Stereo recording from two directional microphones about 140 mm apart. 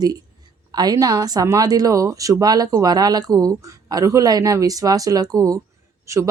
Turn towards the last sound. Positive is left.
turn(degrees=-20)  # may be behind; listen again after turning